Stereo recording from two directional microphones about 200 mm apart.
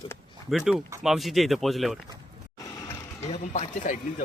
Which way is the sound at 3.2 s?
35° left (ahead or behind).